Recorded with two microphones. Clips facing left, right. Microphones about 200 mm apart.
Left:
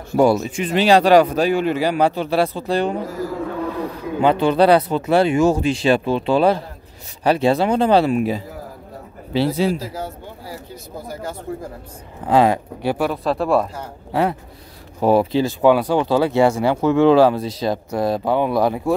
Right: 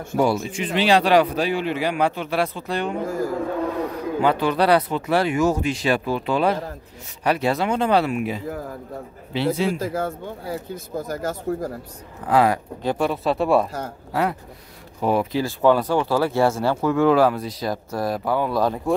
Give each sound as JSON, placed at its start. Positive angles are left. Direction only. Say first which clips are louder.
{"t": 0.2, "sound": "speech", "louder": "left 5 dB", "side_deg": 50}
{"t": 4.2, "sound": "speech", "louder": "left 5 dB", "side_deg": 25}
{"t": 9.8, "sound": "speech", "louder": "right 4 dB", "side_deg": -50}
{"t": 12.3, "sound": "speech", "louder": "left 3 dB", "side_deg": 25}
{"t": 12.8, "sound": "speech", "louder": "left 1 dB", "side_deg": 5}
{"t": 15.0, "sound": "speech", "louder": "left 5 dB", "side_deg": 35}
{"t": 15.4, "sound": "speech", "louder": "left 3 dB", "side_deg": 15}